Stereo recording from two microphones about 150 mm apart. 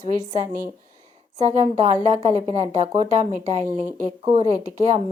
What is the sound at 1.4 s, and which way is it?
A woman's voice, 50° right (ahead or behind).